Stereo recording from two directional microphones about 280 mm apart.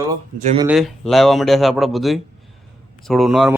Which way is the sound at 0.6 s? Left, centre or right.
Centre.